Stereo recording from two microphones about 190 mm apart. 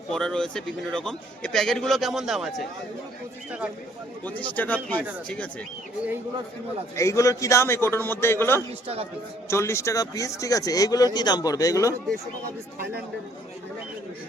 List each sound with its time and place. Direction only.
0.1 s a man's voice: 5° left (ahead or behind)
4.3 s a man's voice: 10° left (ahead or behind)
6.9 s a man's voice: 15° left (ahead or behind)